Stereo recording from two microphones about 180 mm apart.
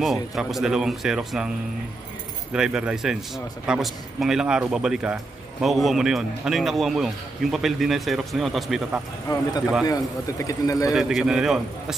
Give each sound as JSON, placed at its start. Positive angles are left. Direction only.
{"t": 0.0, "sound": "a man's voice", "side_deg": 0}
{"t": 2.5, "sound": "a man's voice", "side_deg": -5}
{"t": 9.3, "sound": "a man's voice", "side_deg": 20}
{"t": 10.9, "sound": "a man's voice", "side_deg": 0}